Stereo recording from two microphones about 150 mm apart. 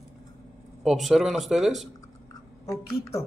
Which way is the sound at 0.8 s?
Centre (ahead or behind).